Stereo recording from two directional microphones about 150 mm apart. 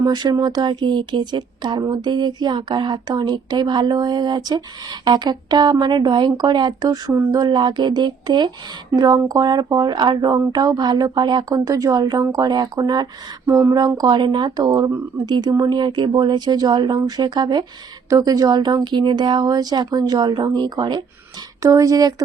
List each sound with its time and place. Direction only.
0.0 s speech: 25° right (ahead or behind)